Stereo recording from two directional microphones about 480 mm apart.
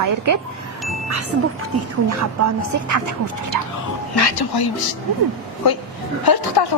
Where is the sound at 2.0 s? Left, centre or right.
Right.